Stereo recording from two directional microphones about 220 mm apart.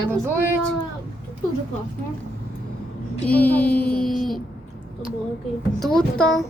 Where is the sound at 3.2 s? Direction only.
5° left (ahead or behind).